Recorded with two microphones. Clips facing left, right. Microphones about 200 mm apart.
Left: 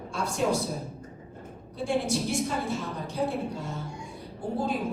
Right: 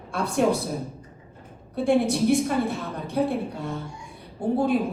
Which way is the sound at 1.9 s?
60° right (ahead or behind).